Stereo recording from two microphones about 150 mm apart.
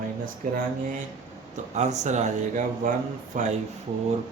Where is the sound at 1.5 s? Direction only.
50° right (ahead or behind).